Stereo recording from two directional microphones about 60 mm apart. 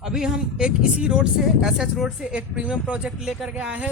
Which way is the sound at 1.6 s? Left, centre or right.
Centre.